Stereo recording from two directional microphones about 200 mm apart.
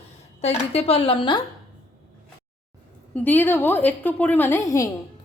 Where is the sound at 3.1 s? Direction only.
10° left (ahead or behind).